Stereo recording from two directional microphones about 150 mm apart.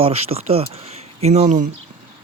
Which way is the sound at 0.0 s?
45° right (ahead or behind).